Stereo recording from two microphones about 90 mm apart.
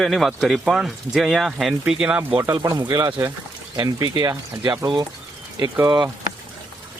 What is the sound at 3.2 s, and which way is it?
Speech, 25° right (ahead or behind).